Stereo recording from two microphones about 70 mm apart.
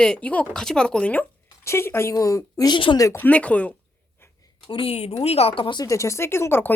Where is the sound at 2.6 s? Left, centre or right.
Left.